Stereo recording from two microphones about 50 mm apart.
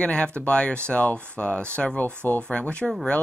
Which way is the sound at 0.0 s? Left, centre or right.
Left.